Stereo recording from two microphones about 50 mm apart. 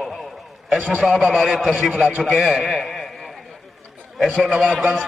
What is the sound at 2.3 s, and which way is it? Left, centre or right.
Speech, centre.